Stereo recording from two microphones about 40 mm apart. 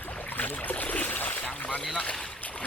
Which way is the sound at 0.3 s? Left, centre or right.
Left.